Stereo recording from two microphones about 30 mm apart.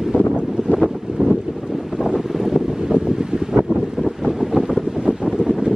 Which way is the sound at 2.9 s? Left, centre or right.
Right.